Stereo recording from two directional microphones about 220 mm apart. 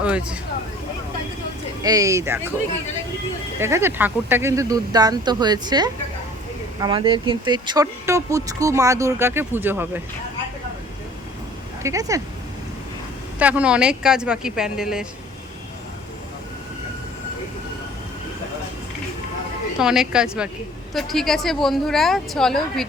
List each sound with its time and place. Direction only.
0.0 s a woman's voice: 5° right (ahead or behind)
1.8 s speech: 15° right (ahead or behind)
3.6 s speech: 10° right (ahead or behind)
11.8 s speech: 15° right (ahead or behind)
13.4 s a woman's voice: 5° right (ahead or behind)
19.8 s a woman's voice: centre (ahead or behind)